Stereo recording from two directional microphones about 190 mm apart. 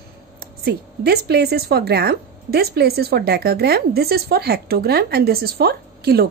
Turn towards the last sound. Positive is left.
turn(degrees=-55)  # may be behind; listen again after turning